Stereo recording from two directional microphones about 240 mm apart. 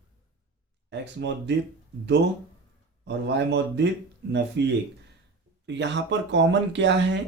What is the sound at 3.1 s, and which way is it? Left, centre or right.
Speech, right.